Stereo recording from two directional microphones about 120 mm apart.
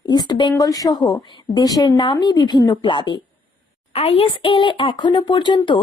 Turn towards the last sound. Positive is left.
turn(degrees=40)  # may be behind; listen again after turning